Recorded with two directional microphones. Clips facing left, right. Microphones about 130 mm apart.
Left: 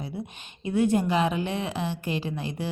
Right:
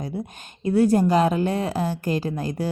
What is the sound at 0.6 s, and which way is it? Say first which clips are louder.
A woman's voice: right 5 dB; 40° right (ahead or behind).